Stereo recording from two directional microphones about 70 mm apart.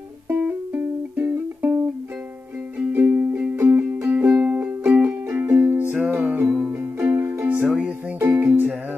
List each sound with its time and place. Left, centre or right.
0.3 s music: right
1.1 s music: right
2.9 s music: right
5.4 s music: right
7.6 s music: centre
8.2 s music: right